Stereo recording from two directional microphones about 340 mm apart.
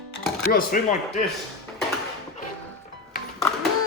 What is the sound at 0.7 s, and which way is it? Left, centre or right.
Speech, left.